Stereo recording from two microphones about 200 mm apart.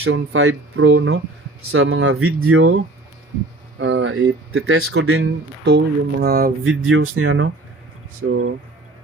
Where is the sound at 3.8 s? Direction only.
75° right (ahead or behind).